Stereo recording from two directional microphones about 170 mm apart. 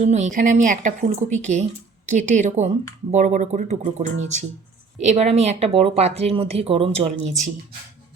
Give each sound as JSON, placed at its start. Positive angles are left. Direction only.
{"t": 0.0, "sound": "speech", "side_deg": -45}